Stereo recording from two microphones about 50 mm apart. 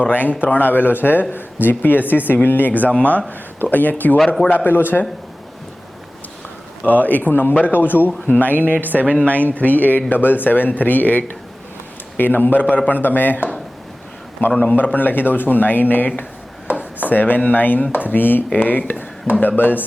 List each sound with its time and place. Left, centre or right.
0.0 s speech: left
6.8 s speech: left
14.5 s speech: left